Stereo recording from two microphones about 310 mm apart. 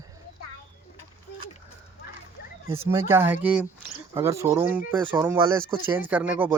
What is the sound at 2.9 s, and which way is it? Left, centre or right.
Speech, centre.